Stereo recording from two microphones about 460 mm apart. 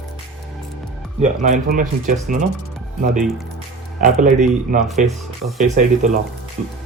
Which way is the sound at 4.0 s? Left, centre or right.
Centre.